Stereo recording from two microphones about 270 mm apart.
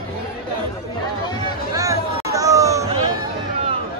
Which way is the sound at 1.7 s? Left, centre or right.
Centre.